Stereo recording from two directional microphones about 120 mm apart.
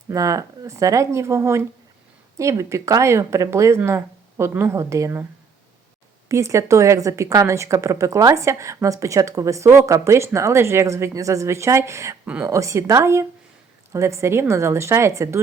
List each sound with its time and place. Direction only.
0.1 s a woman's voice: 30° right (ahead or behind)
6.2 s a woman's voice: 25° right (ahead or behind)